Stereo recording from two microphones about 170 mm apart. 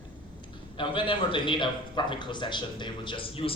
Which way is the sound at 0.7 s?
30° left (ahead or behind).